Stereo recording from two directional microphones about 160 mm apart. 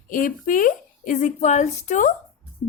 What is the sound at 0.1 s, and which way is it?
A woman's voice, 55° left (ahead or behind).